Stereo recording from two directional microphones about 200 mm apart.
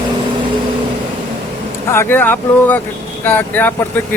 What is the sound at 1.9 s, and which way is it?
Speech, 10° left (ahead or behind).